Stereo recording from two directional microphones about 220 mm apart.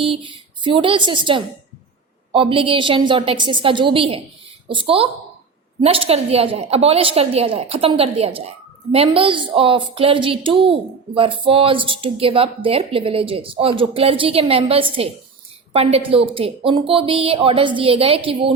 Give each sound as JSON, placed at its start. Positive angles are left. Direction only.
{"t": 0.0, "sound": "a woman's voice", "side_deg": -25}